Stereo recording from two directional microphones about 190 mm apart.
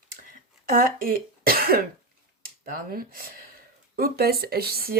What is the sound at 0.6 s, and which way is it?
Speech, 50° right (ahead or behind).